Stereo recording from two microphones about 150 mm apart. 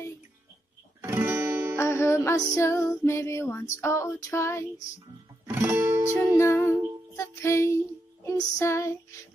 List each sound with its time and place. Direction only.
1.0 s guitar: 15° right (ahead or behind)
1.8 s music: 20° left (ahead or behind)
3.8 s female singing: 20° left (ahead or behind)
5.5 s music: 15° right (ahead or behind)
6.3 s music: 15° left (ahead or behind)
7.2 s child singing: 20° left (ahead or behind)
8.5 s female singing: 20° left (ahead or behind)